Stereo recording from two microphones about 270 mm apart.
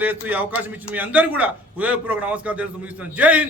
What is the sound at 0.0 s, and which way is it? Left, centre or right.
A man's voice, centre.